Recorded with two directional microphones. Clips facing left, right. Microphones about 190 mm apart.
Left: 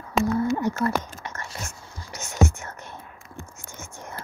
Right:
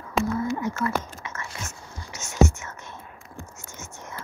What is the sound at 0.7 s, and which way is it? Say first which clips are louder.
Speech: left 2 dB; 35° left (ahead or behind).